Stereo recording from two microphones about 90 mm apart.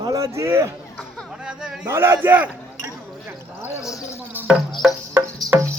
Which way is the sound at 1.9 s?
25° right (ahead or behind).